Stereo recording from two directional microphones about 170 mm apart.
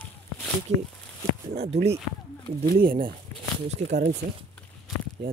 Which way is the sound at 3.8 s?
45° right (ahead or behind).